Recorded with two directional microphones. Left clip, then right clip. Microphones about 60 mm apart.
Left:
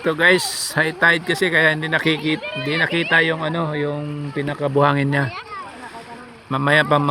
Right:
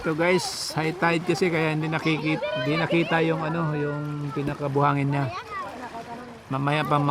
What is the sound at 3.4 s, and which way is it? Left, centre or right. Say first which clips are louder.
Speech: left 5 dB; left.